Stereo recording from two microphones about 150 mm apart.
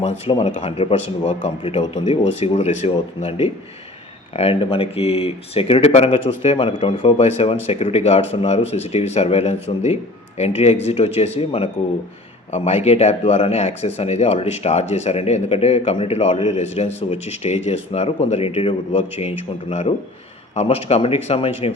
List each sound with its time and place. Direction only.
0.0 s a man's voice: 45° left (ahead or behind)